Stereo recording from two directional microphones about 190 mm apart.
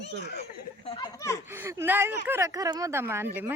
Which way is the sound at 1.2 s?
15° left (ahead or behind).